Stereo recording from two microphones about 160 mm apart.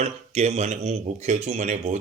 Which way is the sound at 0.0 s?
40° right (ahead or behind).